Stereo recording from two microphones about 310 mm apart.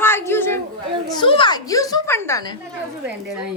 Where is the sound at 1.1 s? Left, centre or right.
Centre.